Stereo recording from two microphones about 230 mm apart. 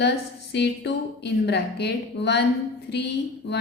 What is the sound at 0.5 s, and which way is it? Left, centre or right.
A woman's voice, left.